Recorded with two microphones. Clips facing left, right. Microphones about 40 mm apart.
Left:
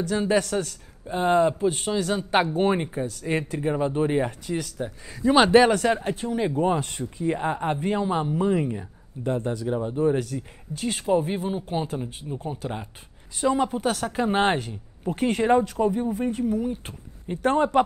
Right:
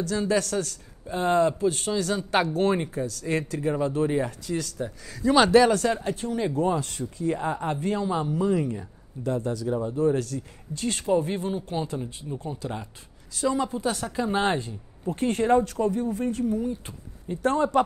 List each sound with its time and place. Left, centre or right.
0.1 s speech: left
6.7 s speech: left
13.3 s speech: left
13.7 s speech: left
14.0 s speech: left
16.4 s speech: left